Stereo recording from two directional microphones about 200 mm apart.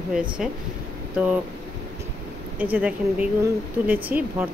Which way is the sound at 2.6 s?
5° right (ahead or behind).